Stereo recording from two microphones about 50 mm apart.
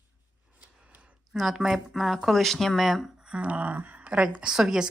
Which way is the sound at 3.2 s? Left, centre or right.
Right.